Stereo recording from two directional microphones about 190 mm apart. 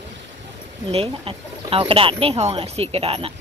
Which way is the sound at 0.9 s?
30° right (ahead or behind).